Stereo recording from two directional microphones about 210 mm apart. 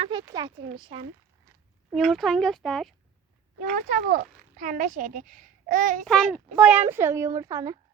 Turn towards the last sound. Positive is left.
turn(degrees=-15)  # may be behind; listen again after turning